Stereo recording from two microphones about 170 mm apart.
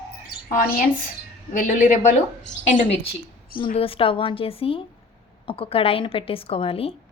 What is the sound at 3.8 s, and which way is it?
A woman's voice, 35° left (ahead or behind).